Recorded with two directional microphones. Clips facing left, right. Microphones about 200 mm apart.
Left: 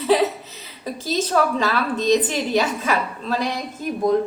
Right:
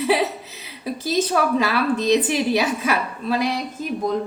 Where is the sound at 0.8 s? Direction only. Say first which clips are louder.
Right 2 dB; 5° right (ahead or behind).